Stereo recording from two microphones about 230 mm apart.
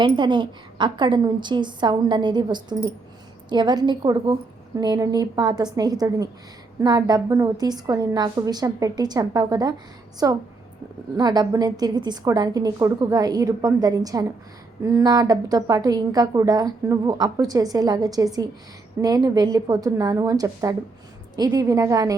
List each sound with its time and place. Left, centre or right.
0.0 s a woman's voice: centre